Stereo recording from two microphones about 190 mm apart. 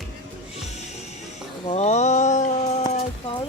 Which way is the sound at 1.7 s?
35° left (ahead or behind).